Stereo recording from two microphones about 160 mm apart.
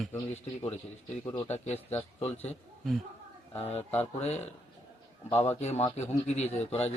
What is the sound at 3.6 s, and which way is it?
Speech, 40° left (ahead or behind).